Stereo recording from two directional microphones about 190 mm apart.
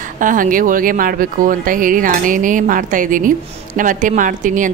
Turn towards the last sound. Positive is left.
turn(degrees=-45)  # may be behind; listen again after turning